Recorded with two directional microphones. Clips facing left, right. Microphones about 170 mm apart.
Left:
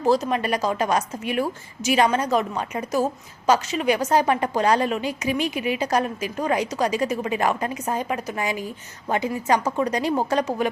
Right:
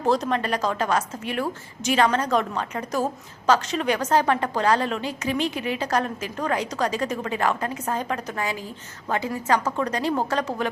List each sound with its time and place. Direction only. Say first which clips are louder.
0.0 s a woman's voice: left 2 dB; 5° left (ahead or behind)